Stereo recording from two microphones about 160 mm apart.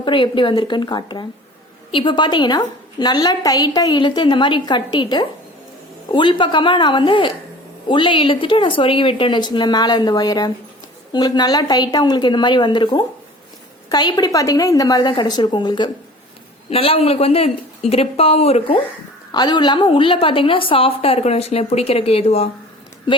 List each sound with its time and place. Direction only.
0.0 s a woman's voice: 30° left (ahead or behind)
19.3 s a woman's voice: 25° left (ahead or behind)